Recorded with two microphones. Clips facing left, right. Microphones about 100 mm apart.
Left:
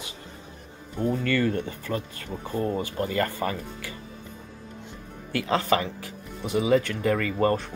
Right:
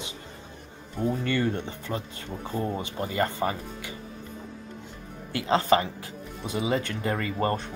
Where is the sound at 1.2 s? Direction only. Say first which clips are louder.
Left 2 dB; 25° right (ahead or behind).